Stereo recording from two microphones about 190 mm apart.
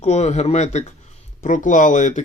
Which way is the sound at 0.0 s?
35° left (ahead or behind).